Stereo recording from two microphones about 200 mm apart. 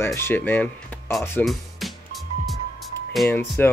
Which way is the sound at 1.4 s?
Centre (ahead or behind).